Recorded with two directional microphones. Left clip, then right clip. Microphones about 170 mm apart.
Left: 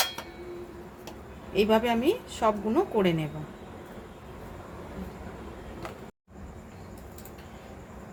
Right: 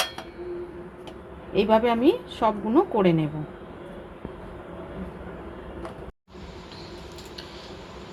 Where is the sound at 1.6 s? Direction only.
25° right (ahead or behind).